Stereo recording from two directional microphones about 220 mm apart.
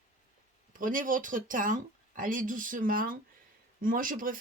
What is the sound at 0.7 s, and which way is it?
Speech, 35° right (ahead or behind).